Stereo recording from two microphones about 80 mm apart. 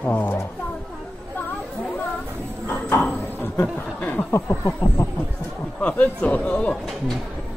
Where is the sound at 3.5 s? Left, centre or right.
Centre.